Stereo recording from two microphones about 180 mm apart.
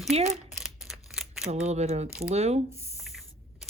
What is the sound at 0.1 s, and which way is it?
Speech, 35° right (ahead or behind).